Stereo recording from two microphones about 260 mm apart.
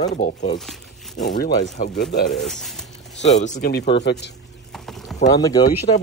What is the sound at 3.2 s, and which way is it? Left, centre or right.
Speech, left.